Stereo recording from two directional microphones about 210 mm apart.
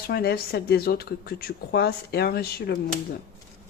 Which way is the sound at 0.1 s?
50° left (ahead or behind).